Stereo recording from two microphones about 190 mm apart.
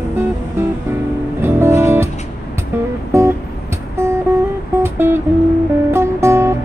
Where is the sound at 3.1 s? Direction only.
15° right (ahead or behind).